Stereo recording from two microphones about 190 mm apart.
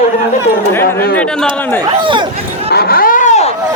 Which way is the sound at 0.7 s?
10° left (ahead or behind).